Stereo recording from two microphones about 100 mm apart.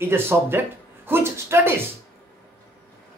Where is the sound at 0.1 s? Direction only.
25° right (ahead or behind).